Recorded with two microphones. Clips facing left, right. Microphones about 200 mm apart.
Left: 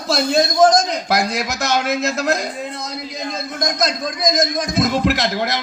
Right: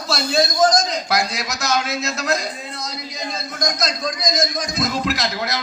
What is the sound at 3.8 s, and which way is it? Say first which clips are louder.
Speech: left 3 dB; 55° left (ahead or behind).